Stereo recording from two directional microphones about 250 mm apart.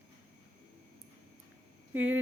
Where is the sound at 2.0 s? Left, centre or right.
Right.